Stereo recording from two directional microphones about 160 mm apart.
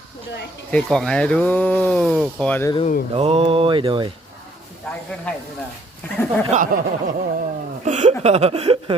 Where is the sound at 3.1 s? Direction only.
40° right (ahead or behind).